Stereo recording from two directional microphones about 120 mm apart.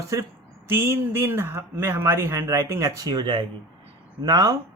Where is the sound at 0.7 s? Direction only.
20° right (ahead or behind).